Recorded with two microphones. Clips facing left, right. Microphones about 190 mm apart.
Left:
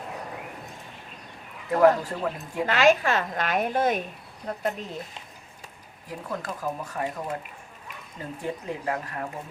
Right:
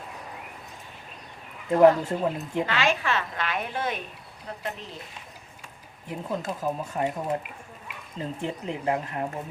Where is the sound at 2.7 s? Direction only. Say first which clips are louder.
Left 9 dB; 45° left (ahead or behind).